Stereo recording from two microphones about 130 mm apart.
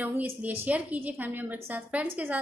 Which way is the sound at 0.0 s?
10° right (ahead or behind).